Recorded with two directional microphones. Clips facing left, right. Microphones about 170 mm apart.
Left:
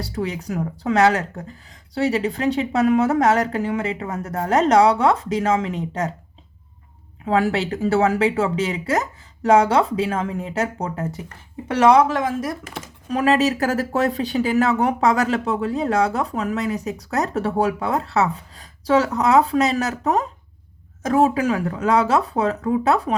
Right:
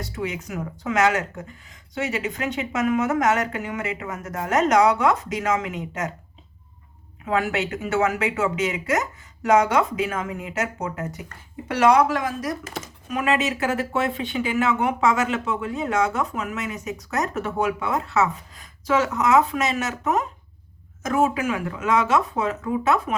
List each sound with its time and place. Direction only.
0.0 s speech: 35° left (ahead or behind)
7.3 s speech: 30° left (ahead or behind)